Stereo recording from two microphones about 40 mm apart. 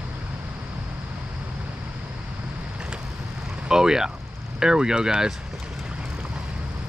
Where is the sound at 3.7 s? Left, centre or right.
Centre.